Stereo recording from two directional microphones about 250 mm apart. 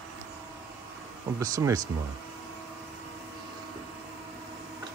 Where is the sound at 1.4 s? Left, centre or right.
Centre.